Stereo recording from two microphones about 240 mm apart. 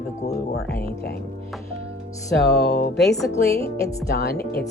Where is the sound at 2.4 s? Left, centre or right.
Left.